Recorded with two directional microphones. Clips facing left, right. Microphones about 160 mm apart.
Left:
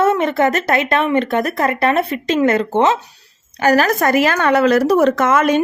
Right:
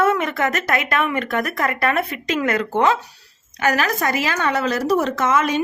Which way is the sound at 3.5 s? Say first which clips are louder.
Left 6 dB; 40° left (ahead or behind).